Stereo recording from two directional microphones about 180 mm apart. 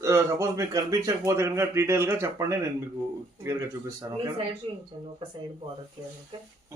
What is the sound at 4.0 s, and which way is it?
Speech, 20° right (ahead or behind).